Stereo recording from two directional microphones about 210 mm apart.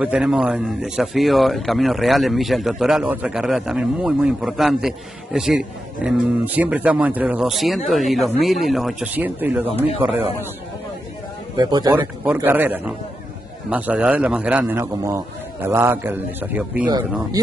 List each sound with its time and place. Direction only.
0.0 s speech: 5° right (ahead or behind)
11.5 s speech: 20° right (ahead or behind)
12.3 s a man's voice: 10° right (ahead or behind)
16.8 s speech: 20° right (ahead or behind)